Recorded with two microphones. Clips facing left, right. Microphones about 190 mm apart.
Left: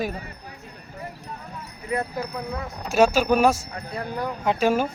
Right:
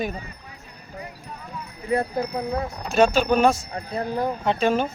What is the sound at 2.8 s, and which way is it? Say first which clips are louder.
Speech: even; 10° left (ahead or behind).